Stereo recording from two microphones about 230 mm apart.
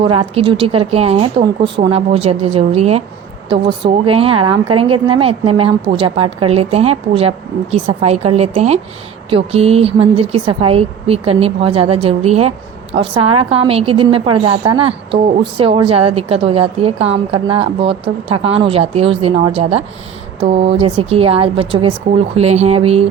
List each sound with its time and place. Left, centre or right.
0.0 s a woman's voice: right